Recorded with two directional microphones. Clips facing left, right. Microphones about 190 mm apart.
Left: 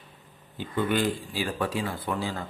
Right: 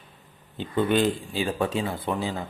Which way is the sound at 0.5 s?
25° right (ahead or behind).